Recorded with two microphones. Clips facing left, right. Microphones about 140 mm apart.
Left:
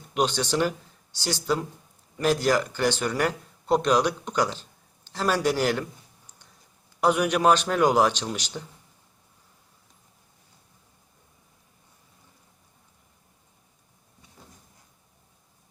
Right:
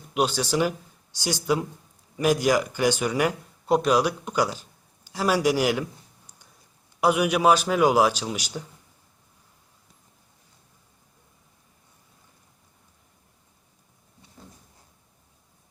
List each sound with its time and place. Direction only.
0.1 s speech: 5° right (ahead or behind)
5.0 s a sound: 10° right (ahead or behind)
7.0 s speech: 10° right (ahead or behind)